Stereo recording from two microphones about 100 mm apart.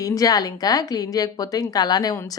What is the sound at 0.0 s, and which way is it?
A woman's voice, 35° left (ahead or behind).